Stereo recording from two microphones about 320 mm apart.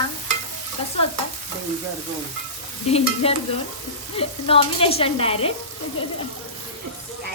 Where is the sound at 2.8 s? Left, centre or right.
Centre.